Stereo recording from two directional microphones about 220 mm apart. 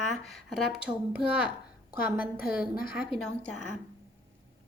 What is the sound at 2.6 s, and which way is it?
Speech, 40° left (ahead or behind).